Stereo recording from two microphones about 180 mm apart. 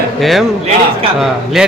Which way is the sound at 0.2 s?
Centre (ahead or behind).